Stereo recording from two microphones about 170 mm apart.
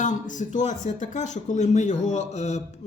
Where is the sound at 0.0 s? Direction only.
45° left (ahead or behind).